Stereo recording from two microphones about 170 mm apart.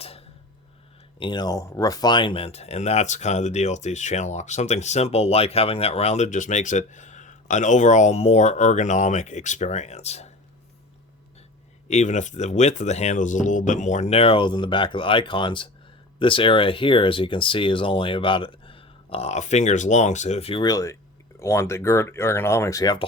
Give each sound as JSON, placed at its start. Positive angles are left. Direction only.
{"t": 1.2, "sound": "speech", "side_deg": 25}
{"t": 11.9, "sound": "speech", "side_deg": 45}